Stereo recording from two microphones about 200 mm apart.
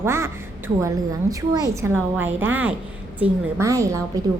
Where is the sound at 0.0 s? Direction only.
15° right (ahead or behind).